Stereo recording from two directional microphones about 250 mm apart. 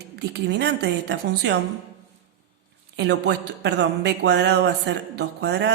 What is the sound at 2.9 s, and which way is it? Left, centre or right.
A man's voice, right.